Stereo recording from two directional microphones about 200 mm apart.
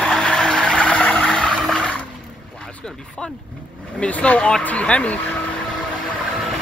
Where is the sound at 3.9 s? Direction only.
5° left (ahead or behind).